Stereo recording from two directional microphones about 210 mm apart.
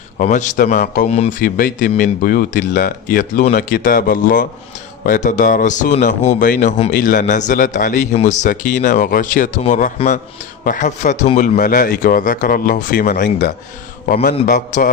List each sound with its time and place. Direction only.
0.2 s speech: 35° left (ahead or behind)